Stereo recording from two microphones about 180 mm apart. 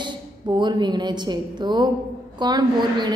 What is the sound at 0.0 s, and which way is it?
A woman's voice, 25° right (ahead or behind).